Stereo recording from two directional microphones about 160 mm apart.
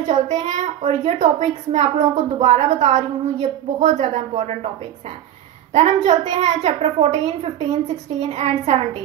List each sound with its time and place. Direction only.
0.0 s a woman's voice: 45° right (ahead or behind)
5.7 s a woman's voice: 45° right (ahead or behind)